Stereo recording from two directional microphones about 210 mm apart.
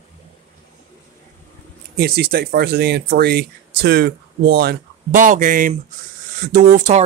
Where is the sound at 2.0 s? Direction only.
50° right (ahead or behind).